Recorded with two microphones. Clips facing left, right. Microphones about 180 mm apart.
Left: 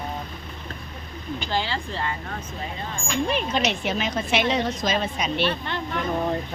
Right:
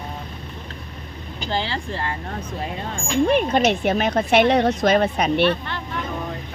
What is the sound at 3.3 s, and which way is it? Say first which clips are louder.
A woman's voice: right 7 dB; 55° right (ahead or behind).